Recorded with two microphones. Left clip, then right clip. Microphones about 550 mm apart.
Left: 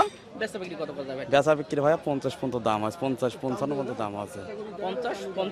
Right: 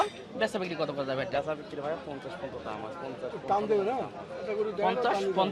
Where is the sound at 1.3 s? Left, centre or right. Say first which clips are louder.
Left 10 dB; left.